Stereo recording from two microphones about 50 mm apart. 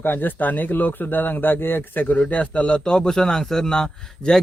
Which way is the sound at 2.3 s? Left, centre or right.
Left.